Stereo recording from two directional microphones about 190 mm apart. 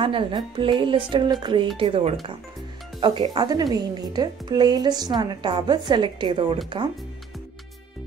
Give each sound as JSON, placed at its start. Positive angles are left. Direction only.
{"t": 0.0, "sound": "a woman's voice", "side_deg": -25}